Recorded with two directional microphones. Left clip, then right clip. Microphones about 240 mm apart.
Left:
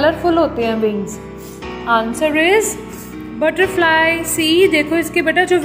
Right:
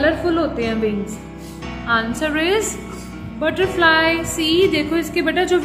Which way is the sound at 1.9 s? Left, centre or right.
Centre.